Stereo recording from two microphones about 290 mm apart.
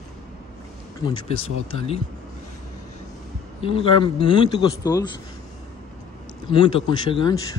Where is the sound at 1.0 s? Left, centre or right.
Centre.